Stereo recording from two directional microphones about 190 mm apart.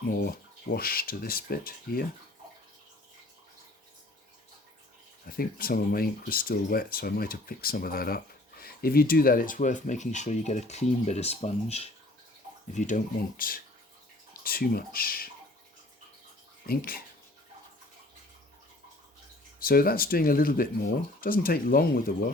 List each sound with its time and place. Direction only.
0.1 s speech: 50° left (ahead or behind)
5.2 s speech: 50° left (ahead or behind)
16.6 s speech: 50° left (ahead or behind)
19.5 s speech: 50° left (ahead or behind)